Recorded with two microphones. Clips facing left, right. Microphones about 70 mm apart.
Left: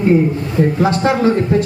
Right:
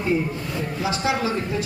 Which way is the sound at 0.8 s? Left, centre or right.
Left.